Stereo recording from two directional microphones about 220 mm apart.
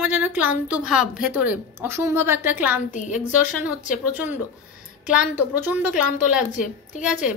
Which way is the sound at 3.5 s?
5° right (ahead or behind).